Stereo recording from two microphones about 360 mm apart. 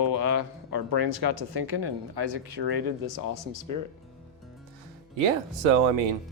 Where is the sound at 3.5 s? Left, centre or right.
Right.